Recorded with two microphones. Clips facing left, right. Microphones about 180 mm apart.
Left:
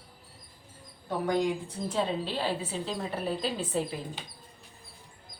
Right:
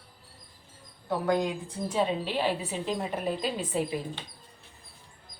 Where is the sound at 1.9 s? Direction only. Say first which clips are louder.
Right 3 dB; 15° right (ahead or behind).